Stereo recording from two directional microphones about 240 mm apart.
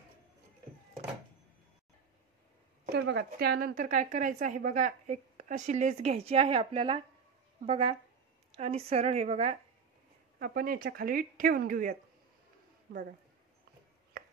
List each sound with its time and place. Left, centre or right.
2.8 s a woman's voice: right
10.4 s a woman's voice: right